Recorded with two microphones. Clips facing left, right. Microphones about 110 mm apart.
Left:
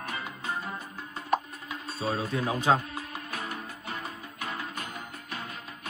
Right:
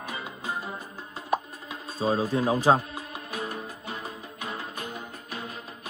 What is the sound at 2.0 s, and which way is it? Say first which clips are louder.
Speech: right 5 dB; 30° right (ahead or behind).